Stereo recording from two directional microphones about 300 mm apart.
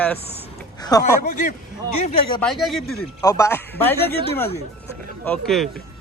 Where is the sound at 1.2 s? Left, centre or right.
Left.